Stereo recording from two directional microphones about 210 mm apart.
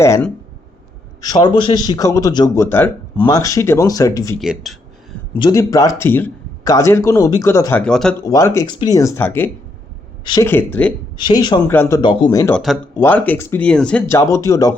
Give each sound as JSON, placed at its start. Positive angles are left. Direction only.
{"t": 0.0, "sound": "a man's voice", "side_deg": 15}
{"t": 4.4, "sound": "speech", "side_deg": 0}
{"t": 5.4, "sound": "a man's voice", "side_deg": 15}
{"t": 8.2, "sound": "a man's voice", "side_deg": 15}
{"t": 11.2, "sound": "a man's voice", "side_deg": 20}
{"t": 12.5, "sound": "a man's voice", "side_deg": 0}